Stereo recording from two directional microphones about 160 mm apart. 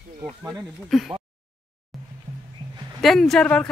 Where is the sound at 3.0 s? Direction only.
Centre (ahead or behind).